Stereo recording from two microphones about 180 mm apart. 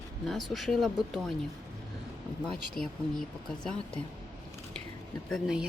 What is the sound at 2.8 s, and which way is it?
Speech, 50° left (ahead or behind).